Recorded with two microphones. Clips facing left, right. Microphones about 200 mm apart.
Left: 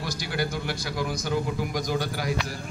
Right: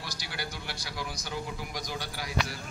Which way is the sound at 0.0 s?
50° left (ahead or behind).